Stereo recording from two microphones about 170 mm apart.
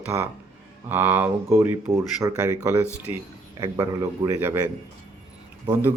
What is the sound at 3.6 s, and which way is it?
A man's voice, 25° right (ahead or behind).